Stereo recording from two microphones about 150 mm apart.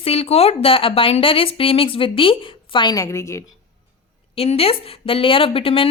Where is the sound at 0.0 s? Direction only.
40° left (ahead or behind); by 3.4 s 20° left (ahead or behind).